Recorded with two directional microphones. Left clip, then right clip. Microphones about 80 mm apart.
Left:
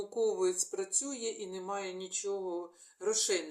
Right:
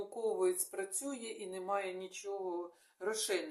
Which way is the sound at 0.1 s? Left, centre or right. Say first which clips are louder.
Left 3 dB; right.